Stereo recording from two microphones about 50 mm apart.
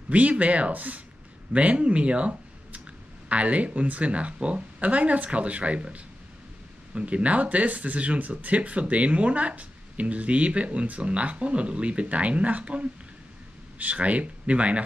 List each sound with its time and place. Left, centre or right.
0.1 s speech: right